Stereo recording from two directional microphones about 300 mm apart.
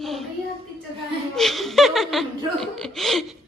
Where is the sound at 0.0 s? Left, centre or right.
Centre.